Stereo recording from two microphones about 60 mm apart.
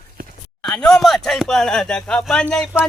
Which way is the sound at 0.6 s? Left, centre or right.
Centre.